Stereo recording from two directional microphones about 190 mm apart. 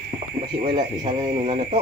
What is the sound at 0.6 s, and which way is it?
Speech, 25° right (ahead or behind).